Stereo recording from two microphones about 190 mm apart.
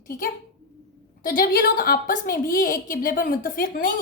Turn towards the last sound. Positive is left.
turn(degrees=45)  # may be behind; listen again after turning